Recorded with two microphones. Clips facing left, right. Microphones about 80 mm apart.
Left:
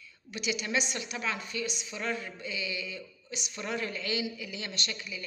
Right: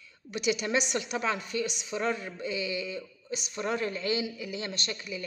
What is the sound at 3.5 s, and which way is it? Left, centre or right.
Speech, right.